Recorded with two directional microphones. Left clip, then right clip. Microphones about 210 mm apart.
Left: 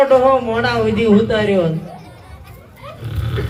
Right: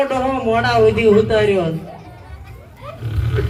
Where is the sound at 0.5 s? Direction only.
45° left (ahead or behind).